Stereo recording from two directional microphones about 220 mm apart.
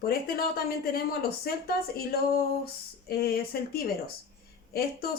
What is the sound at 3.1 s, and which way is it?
Speech, 45° left (ahead or behind).